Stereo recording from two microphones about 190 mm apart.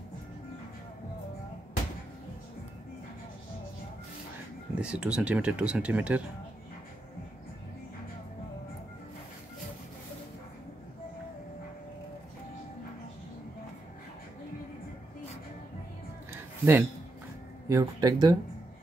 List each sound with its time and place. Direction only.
4.7 s speech: 5° right (ahead or behind)
16.3 s music: 10° right (ahead or behind)
17.6 s speech: 20° right (ahead or behind)